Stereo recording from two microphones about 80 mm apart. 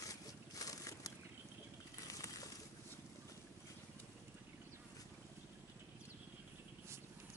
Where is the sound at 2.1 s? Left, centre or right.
Left.